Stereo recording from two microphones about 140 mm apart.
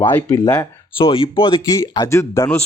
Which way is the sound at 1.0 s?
40° left (ahead or behind).